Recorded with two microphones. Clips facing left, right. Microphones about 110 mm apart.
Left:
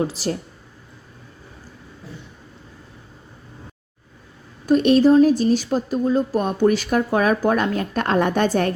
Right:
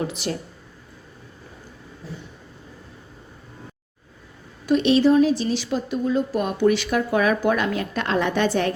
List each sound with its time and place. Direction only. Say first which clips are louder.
0.0 s speech: left 4 dB; 35° left (ahead or behind)
4.6 s speech: left 3 dB; 45° left (ahead or behind)